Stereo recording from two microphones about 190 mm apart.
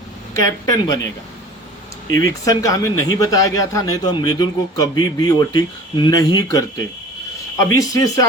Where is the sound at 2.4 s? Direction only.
20° left (ahead or behind).